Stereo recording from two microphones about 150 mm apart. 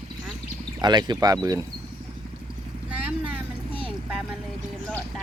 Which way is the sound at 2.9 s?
10° right (ahead or behind).